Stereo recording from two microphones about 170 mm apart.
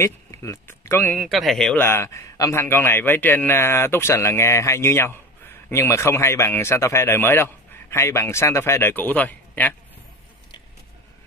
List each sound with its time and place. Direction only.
0.0 s speech: 15° left (ahead or behind)
1.2 s speech: centre (ahead or behind)
1.9 s a man's voice: 15° left (ahead or behind)